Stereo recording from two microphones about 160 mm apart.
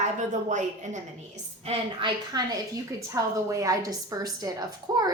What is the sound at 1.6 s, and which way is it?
A woman's voice, 30° right (ahead or behind).